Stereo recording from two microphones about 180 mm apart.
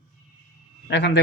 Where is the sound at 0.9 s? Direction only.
75° left (ahead or behind).